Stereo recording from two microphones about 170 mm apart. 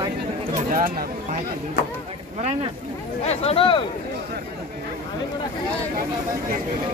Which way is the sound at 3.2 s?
40° left (ahead or behind).